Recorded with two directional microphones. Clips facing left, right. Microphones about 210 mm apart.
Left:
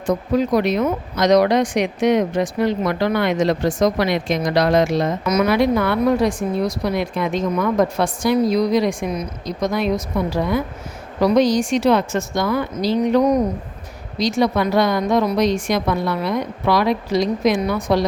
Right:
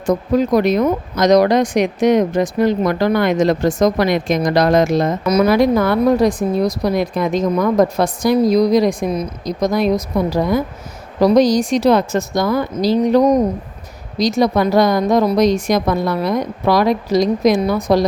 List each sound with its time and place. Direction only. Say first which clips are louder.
0.0 s speech: right 3 dB; 45° right (ahead or behind)